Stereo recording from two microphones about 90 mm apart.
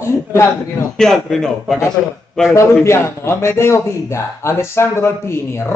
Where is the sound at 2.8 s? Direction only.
30° left (ahead or behind).